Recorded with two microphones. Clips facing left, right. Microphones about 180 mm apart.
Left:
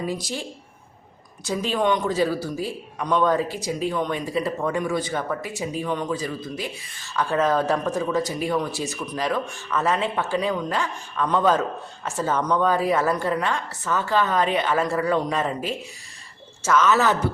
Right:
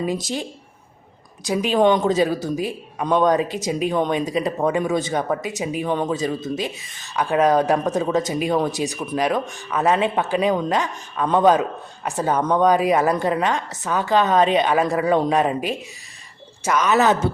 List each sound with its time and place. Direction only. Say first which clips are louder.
0.0 s a man's voice: right 4 dB; 20° right (ahead or behind)
1.5 s a woman's voice: right 5 dB; 15° right (ahead or behind)